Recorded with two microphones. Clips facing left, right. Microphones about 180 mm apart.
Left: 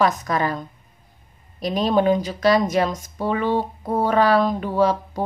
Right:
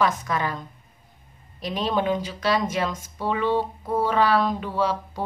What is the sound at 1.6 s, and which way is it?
Speech, 40° left (ahead or behind).